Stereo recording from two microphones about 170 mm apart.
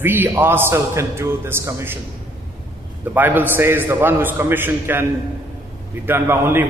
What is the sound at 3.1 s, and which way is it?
A man's voice, 10° right (ahead or behind).